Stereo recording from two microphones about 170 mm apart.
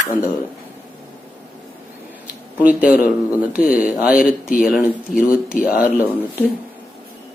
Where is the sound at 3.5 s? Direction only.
55° left (ahead or behind).